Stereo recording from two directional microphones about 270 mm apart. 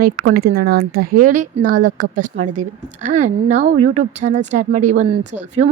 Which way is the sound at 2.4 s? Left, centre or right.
Right.